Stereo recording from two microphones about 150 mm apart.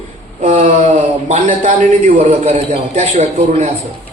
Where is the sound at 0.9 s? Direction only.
50° right (ahead or behind).